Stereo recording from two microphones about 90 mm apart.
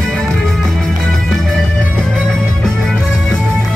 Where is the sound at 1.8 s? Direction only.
15° left (ahead or behind).